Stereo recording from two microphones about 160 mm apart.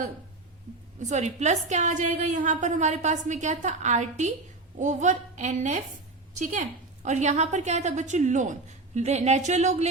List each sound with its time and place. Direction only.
0.9 s a woman's voice: 50° right (ahead or behind)